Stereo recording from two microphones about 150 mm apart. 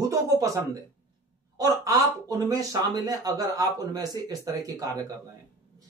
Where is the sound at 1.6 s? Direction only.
25° right (ahead or behind).